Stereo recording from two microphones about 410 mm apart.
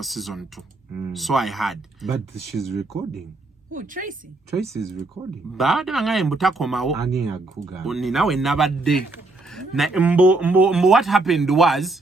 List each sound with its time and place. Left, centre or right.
0.0 s a man's voice: centre
3.7 s a woman's voice: centre
5.5 s a man's voice: centre